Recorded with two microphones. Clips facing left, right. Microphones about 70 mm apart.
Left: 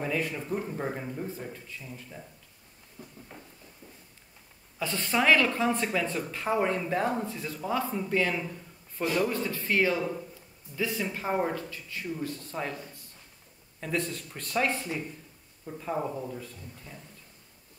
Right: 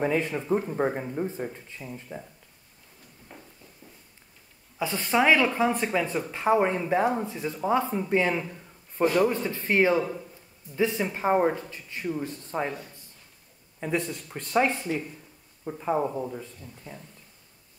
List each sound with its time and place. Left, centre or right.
0.0 s speech: right
3.0 s a sound: left
4.7 s speech: centre
13.7 s speech: centre